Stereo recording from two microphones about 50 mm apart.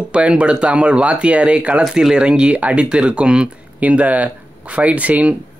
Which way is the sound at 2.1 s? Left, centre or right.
Centre.